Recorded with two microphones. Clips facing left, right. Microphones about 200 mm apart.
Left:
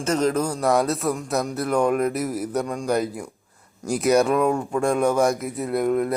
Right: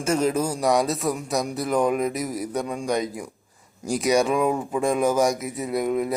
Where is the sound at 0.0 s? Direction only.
10° right (ahead or behind).